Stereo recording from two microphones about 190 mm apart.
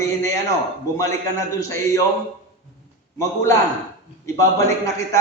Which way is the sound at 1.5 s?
15° left (ahead or behind).